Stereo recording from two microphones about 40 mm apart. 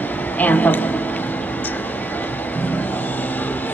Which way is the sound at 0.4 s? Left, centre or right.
Left.